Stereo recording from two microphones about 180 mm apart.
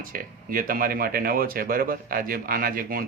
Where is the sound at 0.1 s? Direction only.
50° right (ahead or behind).